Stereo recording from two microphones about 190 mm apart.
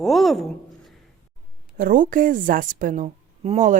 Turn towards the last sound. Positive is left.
turn(degrees=-35)  # may be behind; listen again after turning